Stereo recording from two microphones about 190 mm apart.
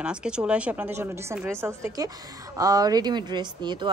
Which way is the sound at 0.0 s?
5° right (ahead or behind).